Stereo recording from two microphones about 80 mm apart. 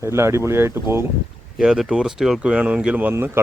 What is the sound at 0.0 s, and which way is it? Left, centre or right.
Speech, right.